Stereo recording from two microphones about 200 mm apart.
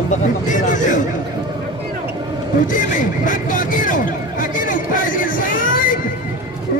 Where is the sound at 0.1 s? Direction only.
40° left (ahead or behind).